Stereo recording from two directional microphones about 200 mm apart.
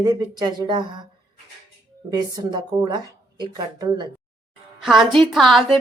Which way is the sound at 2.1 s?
20° right (ahead or behind).